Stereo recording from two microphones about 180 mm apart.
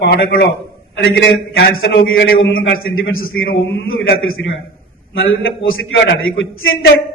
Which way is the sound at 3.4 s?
90° left.